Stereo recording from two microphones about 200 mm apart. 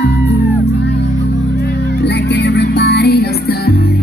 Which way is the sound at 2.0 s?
60° left (ahead or behind).